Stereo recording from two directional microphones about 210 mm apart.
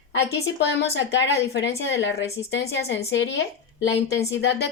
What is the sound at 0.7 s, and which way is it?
A woman's voice, 55° left (ahead or behind).